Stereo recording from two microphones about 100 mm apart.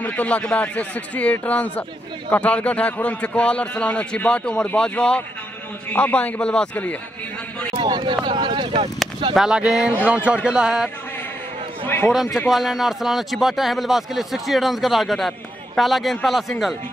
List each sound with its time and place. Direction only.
0.0 s a man's voice: 15° left (ahead or behind)
7.8 s speech: 55° right (ahead or behind)
9.3 s a man's voice: 5° right (ahead or behind)
11.8 s a man's voice: 20° left (ahead or behind)
12.1 s speech: 5° right (ahead or behind)